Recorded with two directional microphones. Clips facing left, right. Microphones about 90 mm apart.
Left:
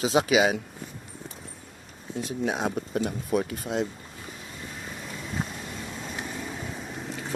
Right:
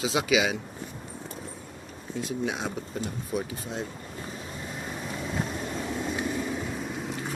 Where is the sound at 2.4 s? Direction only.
45° left (ahead or behind).